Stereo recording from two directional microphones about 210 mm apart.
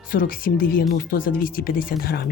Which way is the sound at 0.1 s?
45° left (ahead or behind).